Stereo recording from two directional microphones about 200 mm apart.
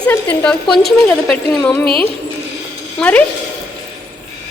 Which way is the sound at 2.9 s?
5° left (ahead or behind).